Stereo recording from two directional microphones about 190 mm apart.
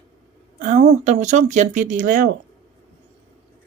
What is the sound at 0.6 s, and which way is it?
Speech, 40° right (ahead or behind).